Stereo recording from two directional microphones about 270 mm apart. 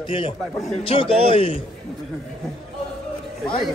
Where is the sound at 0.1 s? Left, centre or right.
Centre.